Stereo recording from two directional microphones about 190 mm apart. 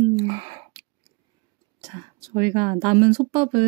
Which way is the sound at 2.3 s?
35° right (ahead or behind).